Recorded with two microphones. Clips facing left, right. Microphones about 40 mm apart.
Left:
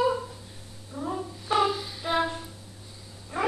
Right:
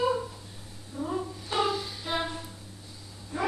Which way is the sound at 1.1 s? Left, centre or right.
Centre.